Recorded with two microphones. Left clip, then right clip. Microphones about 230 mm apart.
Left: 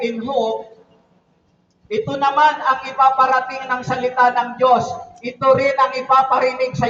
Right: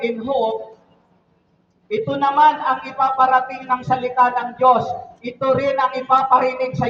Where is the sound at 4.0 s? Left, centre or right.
Centre.